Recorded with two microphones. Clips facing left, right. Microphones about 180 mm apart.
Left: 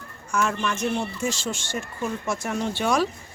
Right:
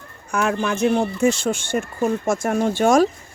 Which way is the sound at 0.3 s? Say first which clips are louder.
Right 4 dB; 60° right (ahead or behind).